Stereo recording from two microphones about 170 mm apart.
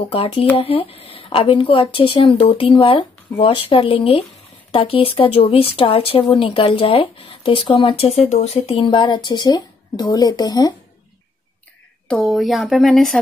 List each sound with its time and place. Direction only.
0.1 s speech: 35° left (ahead or behind)
12.1 s speech: 5° left (ahead or behind)